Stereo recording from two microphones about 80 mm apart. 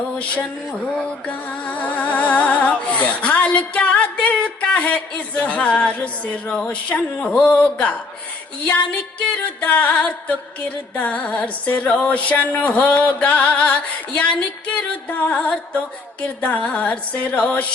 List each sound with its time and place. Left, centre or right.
0.2 s a sound: centre
0.9 s music: centre
9.6 s music: centre